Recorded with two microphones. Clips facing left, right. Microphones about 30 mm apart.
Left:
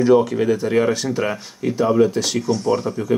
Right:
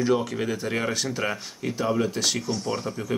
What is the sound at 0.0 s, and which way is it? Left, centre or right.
Speech, centre.